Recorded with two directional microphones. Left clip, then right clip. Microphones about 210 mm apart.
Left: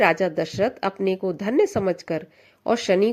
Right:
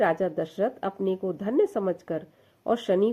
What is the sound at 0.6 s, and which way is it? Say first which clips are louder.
Speech: left 4 dB; 25° left (ahead or behind).